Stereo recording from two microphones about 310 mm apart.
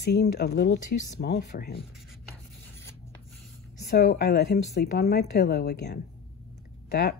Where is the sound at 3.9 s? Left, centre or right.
Left.